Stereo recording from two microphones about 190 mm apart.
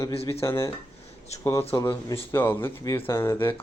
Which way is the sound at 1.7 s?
15° left (ahead or behind).